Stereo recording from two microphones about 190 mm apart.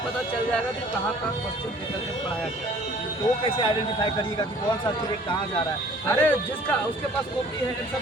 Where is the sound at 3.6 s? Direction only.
25° left (ahead or behind).